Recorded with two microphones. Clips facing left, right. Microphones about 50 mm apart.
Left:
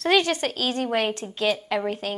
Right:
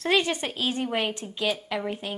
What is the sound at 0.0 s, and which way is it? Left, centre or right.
Speech, centre.